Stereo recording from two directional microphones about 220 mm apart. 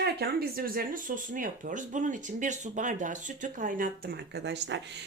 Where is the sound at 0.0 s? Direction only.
45° right (ahead or behind).